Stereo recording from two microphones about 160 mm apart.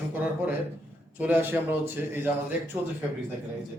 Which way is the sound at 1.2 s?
10° right (ahead or behind).